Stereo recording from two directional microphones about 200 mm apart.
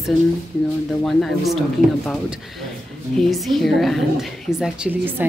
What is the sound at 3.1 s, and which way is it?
A woman's voice, centre (ahead or behind).